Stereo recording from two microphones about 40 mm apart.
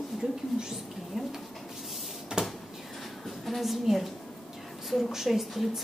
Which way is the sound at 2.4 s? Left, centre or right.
Centre.